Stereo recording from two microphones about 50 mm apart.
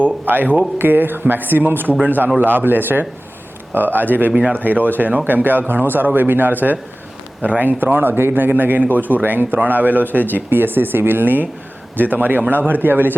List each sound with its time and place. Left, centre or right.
0.0 s speech: right
4.3 s speech: right
4.5 s speech: right